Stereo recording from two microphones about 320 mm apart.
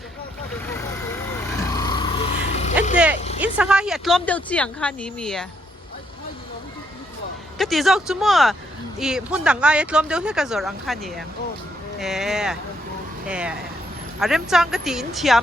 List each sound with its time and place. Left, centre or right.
1.7 s vehicle: centre
3.4 s speech: centre
7.6 s speech: centre